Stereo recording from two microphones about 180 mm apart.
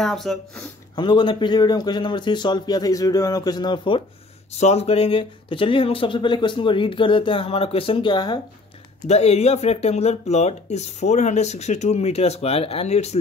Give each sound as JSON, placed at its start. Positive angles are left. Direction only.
{"t": 0.0, "sound": "speech", "side_deg": 0}
{"t": 0.9, "sound": "speech", "side_deg": 25}
{"t": 4.5, "sound": "speech", "side_deg": 35}
{"t": 9.0, "sound": "speech", "side_deg": 35}